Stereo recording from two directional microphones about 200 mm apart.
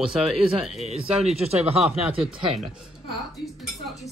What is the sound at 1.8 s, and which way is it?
Speech, 5° right (ahead or behind).